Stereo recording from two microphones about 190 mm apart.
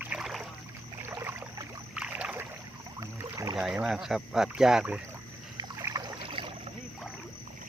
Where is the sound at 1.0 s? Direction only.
10° right (ahead or behind).